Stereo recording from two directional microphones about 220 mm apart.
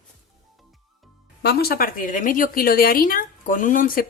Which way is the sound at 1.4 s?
45° left (ahead or behind).